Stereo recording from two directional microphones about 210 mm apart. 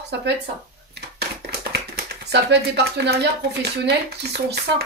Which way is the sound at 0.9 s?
50° right (ahead or behind).